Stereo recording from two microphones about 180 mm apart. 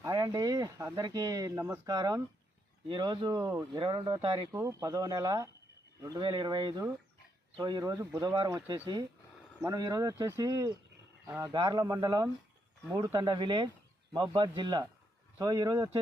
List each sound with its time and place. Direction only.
0.0 s speech: 20° right (ahead or behind)